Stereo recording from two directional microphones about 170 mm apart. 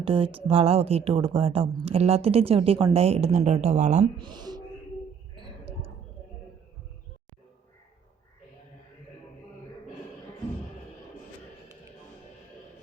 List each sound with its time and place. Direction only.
0.0 s speech: 30° right (ahead or behind)
4.2 s speech: 25° right (ahead or behind)
5.3 s a sound: 35° right (ahead or behind)